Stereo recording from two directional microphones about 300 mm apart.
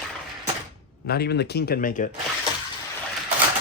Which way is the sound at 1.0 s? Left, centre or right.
Left.